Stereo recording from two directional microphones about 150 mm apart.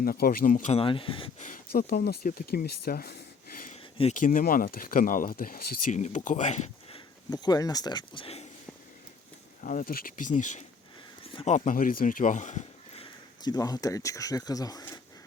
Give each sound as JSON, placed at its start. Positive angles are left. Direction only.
{"t": 0.0, "sound": "speech", "side_deg": 75}
{"t": 0.7, "sound": "speech", "side_deg": 35}
{"t": 1.4, "sound": "speech", "side_deg": 65}
{"t": 4.1, "sound": "speech", "side_deg": 60}
{"t": 5.9, "sound": "speech", "side_deg": 55}
{"t": 7.3, "sound": "speech", "side_deg": 25}
{"t": 9.6, "sound": "speech", "side_deg": 70}
{"t": 13.4, "sound": "speech", "side_deg": 25}